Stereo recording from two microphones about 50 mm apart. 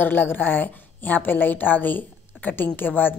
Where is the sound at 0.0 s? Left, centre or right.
Left.